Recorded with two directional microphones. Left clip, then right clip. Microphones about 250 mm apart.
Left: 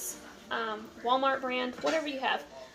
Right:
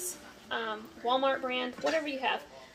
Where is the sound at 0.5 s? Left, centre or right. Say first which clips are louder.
Left 1 dB; centre.